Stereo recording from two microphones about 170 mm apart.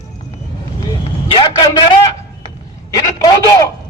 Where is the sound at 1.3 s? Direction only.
25° left (ahead or behind).